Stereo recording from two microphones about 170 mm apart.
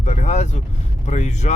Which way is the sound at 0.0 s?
45° left (ahead or behind).